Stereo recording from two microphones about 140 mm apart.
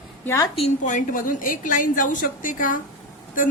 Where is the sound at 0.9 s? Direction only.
70° left (ahead or behind).